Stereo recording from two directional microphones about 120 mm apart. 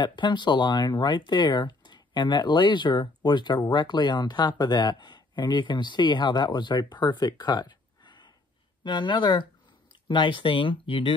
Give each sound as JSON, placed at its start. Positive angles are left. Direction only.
{"t": 0.0, "sound": "speech", "side_deg": 40}